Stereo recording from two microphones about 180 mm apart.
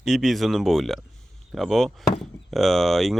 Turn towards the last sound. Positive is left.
turn(degrees=0)  # may be behind; listen again after turning